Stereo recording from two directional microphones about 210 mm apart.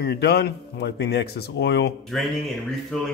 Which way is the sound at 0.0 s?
50° left (ahead or behind).